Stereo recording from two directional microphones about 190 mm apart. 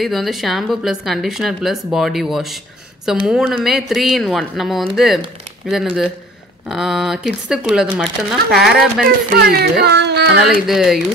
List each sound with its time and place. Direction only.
0.0 s speech: centre (ahead or behind)
9.3 s speech: 55° right (ahead or behind)
10.7 s speech: centre (ahead or behind)